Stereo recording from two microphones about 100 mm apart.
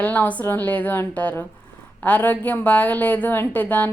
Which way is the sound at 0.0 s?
15° left (ahead or behind).